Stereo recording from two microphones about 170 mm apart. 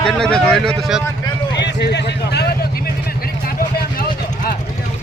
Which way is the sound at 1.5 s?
85° left.